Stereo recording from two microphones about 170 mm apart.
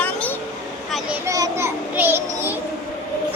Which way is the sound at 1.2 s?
20° right (ahead or behind).